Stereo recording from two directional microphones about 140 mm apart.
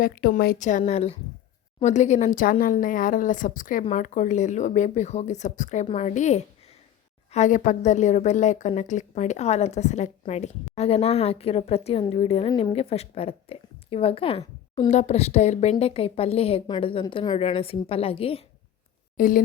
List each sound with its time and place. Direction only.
0.0 s a woman's voice: 85° left; by 14.4 s 40° left (ahead or behind)
14.8 s a woman's voice: 55° left (ahead or behind)
19.1 s speech: 75° left (ahead or behind)